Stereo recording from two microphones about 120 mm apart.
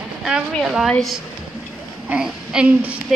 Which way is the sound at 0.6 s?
Centre (ahead or behind).